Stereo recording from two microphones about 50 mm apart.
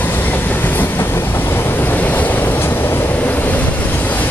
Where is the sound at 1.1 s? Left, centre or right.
Left.